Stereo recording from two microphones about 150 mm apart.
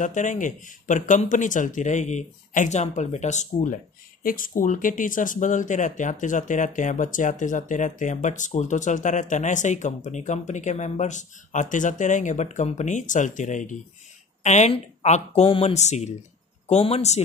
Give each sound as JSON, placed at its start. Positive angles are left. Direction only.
{"t": 0.0, "sound": "speech", "side_deg": 55}
{"t": 4.2, "sound": "a woman's voice", "side_deg": 70}